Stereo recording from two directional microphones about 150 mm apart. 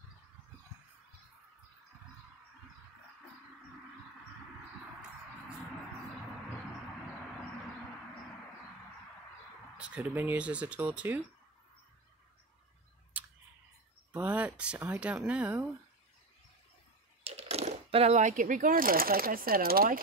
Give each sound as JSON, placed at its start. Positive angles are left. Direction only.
{"t": 9.8, "sound": "speech", "side_deg": -5}
{"t": 13.1, "sound": "clicking", "side_deg": -10}
{"t": 14.1, "sound": "speech", "side_deg": -10}
{"t": 17.2, "sound": "speech", "side_deg": -40}